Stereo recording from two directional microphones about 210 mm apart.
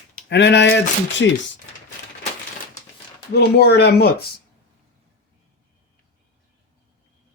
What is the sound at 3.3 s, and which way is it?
Speech, 50° left (ahead or behind).